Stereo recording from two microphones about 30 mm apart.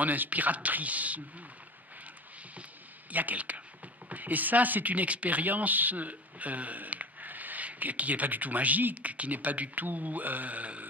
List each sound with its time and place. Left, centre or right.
0.0 s speech: right
3.1 s speech: right
4.1 s speech: right
8.9 s speech: right